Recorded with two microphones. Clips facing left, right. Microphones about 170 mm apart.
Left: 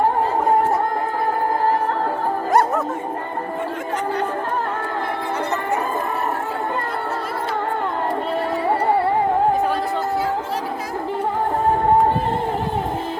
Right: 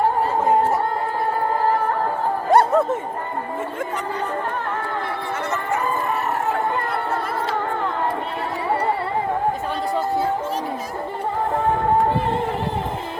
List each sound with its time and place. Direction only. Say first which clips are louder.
2.5 s music: right 3 dB; 30° right (ahead or behind)